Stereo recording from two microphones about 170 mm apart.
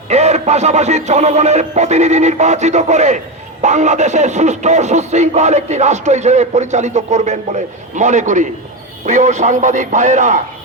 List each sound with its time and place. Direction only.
0.1 s music: 40° right (ahead or behind)
3.6 s speech: 45° right (ahead or behind)